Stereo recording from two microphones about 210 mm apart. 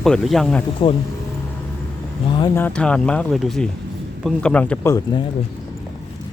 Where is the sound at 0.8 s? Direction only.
25° left (ahead or behind).